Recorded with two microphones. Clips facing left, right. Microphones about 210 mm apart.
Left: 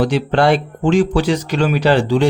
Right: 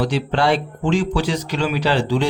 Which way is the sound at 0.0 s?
55° left (ahead or behind).